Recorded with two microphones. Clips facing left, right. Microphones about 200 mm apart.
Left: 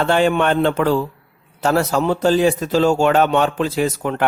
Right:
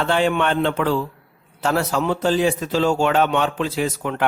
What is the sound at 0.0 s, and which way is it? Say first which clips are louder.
Speech: left 3 dB; 45° left (ahead or behind).